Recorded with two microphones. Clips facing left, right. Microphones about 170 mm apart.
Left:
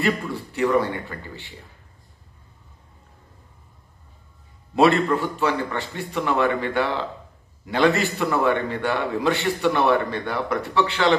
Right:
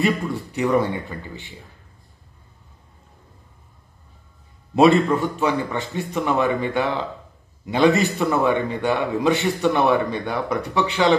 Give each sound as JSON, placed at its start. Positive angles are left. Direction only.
{"t": 0.0, "sound": "speech", "side_deg": -20}
{"t": 4.7, "sound": "a man's voice", "side_deg": -20}